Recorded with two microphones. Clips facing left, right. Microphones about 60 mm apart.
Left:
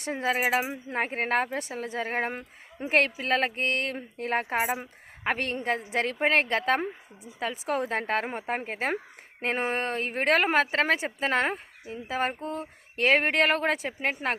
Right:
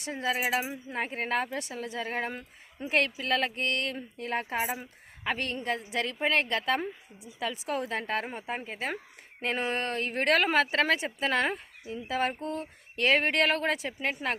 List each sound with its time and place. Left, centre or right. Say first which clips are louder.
0.0 s speech: left 3 dB; left
5.2 s speech: left 3 dB; left
9.4 s speech: left 2 dB; left
12.4 s a sound: left 1 dB; centre
13.0 s speech: left 2 dB; left